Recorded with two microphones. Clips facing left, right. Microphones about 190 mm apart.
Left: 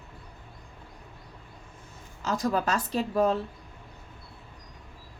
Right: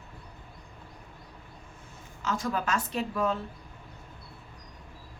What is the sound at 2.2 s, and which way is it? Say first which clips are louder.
Speech: left 4 dB; 40° left (ahead or behind).